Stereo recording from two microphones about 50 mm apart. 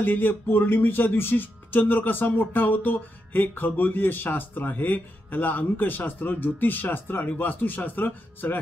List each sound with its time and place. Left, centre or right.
0.0 s speech: left